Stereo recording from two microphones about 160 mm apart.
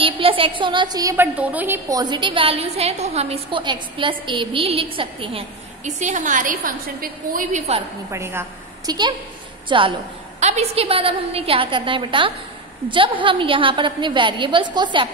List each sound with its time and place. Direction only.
0.0 s a woman's voice: 35° right (ahead or behind)
1.1 s a woman's voice: 10° right (ahead or behind)
1.9 s a woman's voice: 25° right (ahead or behind)
5.9 s a woman's voice: 50° right (ahead or behind)
8.1 s a woman's voice: 15° right (ahead or behind)
9.7 s a woman's voice: 30° right (ahead or behind)